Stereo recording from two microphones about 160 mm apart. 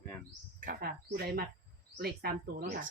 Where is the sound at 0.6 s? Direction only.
70° right (ahead or behind).